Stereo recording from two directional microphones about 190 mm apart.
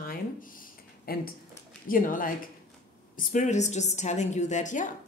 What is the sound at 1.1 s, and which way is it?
A woman's voice, 50° left (ahead or behind).